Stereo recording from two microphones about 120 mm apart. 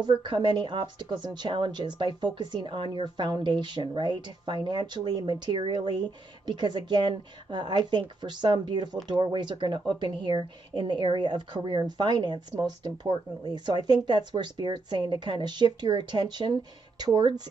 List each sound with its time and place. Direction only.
0.0 s speech: 40° right (ahead or behind)